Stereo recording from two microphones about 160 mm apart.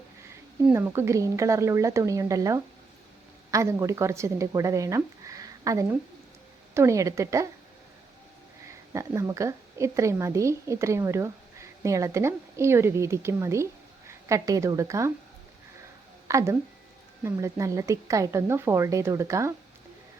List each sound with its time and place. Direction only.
0.6 s a woman's voice: 15° right (ahead or behind)
8.6 s a woman's voice: 20° right (ahead or behind)
16.3 s speech: 15° right (ahead or behind)